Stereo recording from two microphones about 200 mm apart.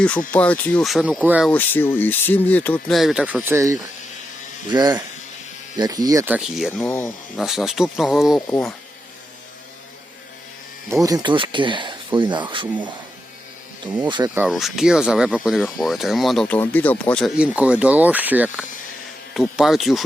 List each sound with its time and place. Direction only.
0.3 s speech: 5° left (ahead or behind)
1.5 s speech: 10° left (ahead or behind)
11.0 s speech: 20° right (ahead or behind)
14.3 s speech: centre (ahead or behind)